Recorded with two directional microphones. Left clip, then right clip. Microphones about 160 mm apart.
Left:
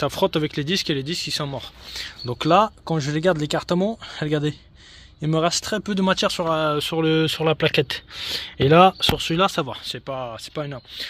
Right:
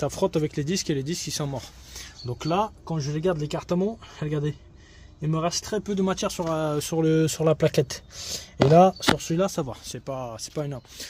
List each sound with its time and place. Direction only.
0.0 s speech: 5° left (ahead or behind)
2.2 s speech: 35° left (ahead or behind)
2.6 s speech: 70° left (ahead or behind); by 5.9 s 50° left (ahead or behind)
5.9 s speech: 20° left (ahead or behind)
6.5 s speech: 10° right (ahead or behind)
8.4 s speech: 5° right (ahead or behind)
9.8 s speech: 20° right (ahead or behind)